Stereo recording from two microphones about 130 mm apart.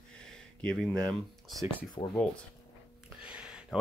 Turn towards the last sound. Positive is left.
turn(degrees=-5)  # may be behind; listen again after turning